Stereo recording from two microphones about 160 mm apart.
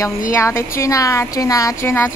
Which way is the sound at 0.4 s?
15° left (ahead or behind).